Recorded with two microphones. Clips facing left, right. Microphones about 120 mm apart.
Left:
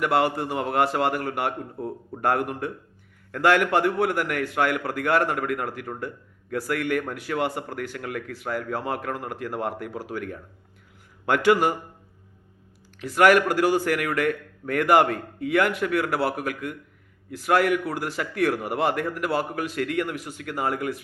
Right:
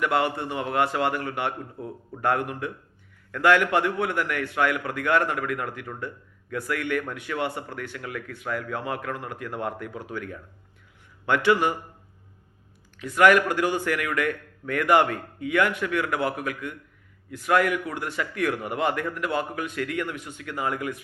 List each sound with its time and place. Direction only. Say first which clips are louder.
0.0 s a man's voice: left 2 dB; 40° left (ahead or behind)
8.3 s a man's voice: left 1 dB; 35° left (ahead or behind)
13.1 s a man's voice: left 1 dB; 40° left (ahead or behind)